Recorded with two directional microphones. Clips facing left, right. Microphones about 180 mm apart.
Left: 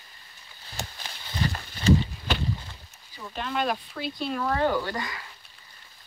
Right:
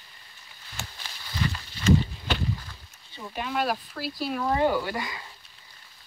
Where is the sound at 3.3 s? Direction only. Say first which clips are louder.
Even; 5° right (ahead or behind).